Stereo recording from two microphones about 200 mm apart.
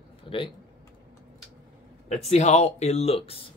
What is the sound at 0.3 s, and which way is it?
Speech, 25° left (ahead or behind).